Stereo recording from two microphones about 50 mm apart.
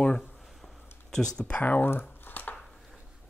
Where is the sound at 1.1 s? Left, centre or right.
Centre.